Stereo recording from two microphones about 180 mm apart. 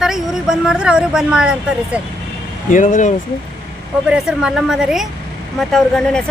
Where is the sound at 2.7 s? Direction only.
45° left (ahead or behind).